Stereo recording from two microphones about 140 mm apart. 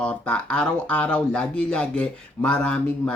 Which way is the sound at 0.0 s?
10° left (ahead or behind).